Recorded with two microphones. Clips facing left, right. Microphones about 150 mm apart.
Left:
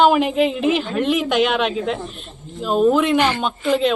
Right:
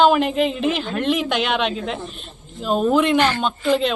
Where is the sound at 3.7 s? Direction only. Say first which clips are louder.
Left 1 dB; 5° left (ahead or behind).